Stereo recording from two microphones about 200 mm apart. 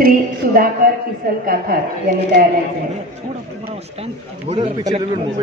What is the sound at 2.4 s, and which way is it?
Speech, 50° right (ahead or behind).